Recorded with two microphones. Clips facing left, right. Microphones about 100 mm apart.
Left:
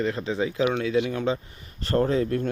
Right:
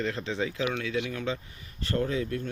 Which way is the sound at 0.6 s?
30° left (ahead or behind).